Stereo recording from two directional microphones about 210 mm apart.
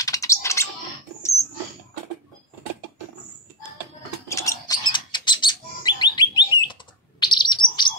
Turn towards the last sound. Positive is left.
turn(degrees=20)  # may be behind; listen again after turning